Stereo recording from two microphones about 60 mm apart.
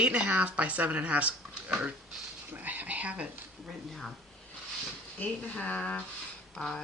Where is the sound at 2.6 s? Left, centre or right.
Right.